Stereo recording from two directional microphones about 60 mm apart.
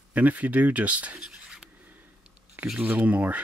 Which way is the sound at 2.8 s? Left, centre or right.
Right.